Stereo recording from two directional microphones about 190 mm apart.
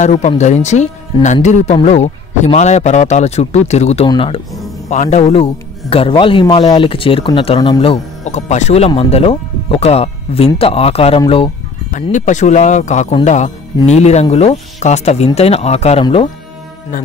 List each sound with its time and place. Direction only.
0.0 s a man's voice: 35° left (ahead or behind)
4.8 s a man's voice: 40° left (ahead or behind)
12.0 s speech: 40° left (ahead or behind)